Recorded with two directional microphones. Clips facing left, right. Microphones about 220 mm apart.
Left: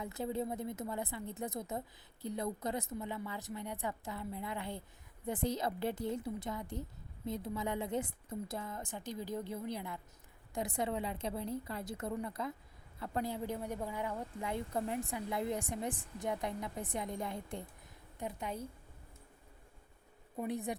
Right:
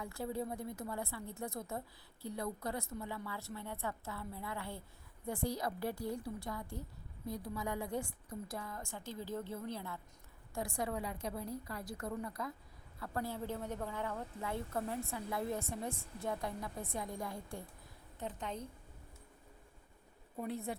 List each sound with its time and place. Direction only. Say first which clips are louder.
0.0 s a woman's voice: left 2 dB; 20° left (ahead or behind)
18.2 s a woman's voice: left 2 dB; 10° left (ahead or behind)
20.3 s a woman's voice: left 3 dB; 15° left (ahead or behind)